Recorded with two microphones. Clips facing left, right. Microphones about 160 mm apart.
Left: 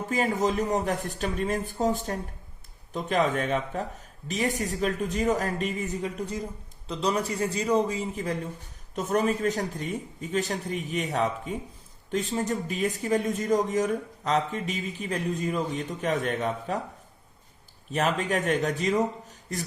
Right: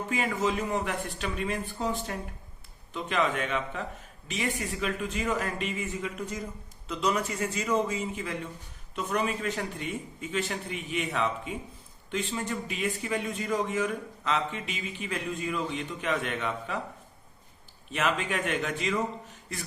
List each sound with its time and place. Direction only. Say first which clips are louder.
0.1 s speech: left 4 dB; 40° left (ahead or behind)
17.9 s speech: left 3 dB; 40° left (ahead or behind)